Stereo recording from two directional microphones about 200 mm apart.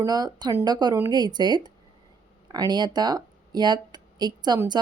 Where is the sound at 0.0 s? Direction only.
20° right (ahead or behind).